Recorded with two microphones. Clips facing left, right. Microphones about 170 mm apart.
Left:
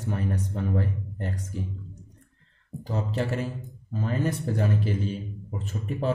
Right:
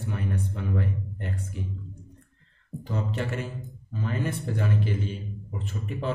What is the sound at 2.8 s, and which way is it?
Speech, 35° left (ahead or behind).